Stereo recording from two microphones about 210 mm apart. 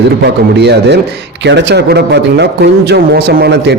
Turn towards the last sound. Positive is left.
turn(degrees=-55)  # may be behind; listen again after turning